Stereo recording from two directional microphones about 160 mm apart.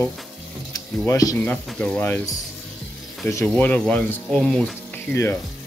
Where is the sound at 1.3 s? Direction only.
10° left (ahead or behind).